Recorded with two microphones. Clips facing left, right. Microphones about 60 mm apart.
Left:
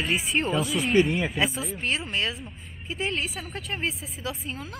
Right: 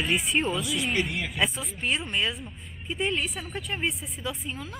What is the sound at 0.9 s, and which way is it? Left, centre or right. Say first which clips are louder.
Speech: left 7 dB; left.